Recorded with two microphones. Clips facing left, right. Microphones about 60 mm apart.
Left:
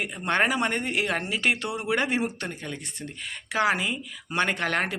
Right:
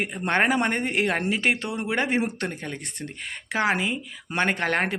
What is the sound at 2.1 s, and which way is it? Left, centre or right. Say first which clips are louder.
Speech: right 3 dB; right.